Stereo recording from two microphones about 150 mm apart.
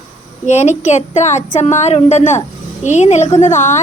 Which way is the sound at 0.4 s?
50° left (ahead or behind).